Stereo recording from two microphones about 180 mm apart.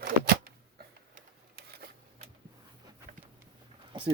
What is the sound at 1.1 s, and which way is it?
Typewriter, 55° right (ahead or behind).